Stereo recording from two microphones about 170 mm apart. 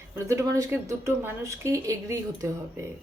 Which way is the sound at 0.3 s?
20° right (ahead or behind).